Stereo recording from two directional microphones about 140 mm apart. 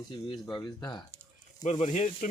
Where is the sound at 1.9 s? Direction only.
60° left (ahead or behind).